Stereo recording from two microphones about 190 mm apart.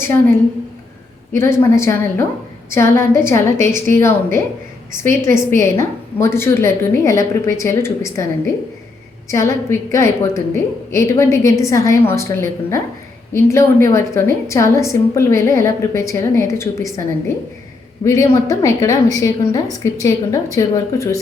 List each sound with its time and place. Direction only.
0.0 s a woman's voice: 10° left (ahead or behind)
1.4 s a woman's voice: 15° left (ahead or behind)
9.3 s a woman's voice: 15° left (ahead or behind)